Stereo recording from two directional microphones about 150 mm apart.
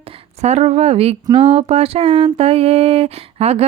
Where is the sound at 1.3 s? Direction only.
40° right (ahead or behind).